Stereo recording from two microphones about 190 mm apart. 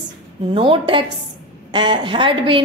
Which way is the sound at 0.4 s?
30° right (ahead or behind).